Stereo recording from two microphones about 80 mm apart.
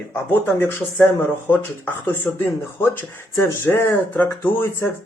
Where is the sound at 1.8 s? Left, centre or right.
Left.